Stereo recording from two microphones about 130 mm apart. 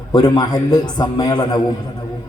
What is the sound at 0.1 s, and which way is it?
A man's voice, 35° left (ahead or behind).